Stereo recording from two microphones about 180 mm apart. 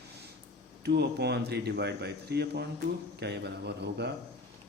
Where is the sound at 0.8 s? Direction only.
65° right (ahead or behind).